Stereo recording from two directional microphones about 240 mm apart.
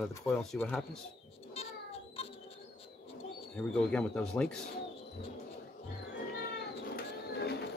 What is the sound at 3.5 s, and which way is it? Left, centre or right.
Speech, centre.